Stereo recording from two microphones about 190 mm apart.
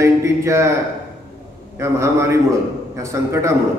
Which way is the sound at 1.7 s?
15° right (ahead or behind).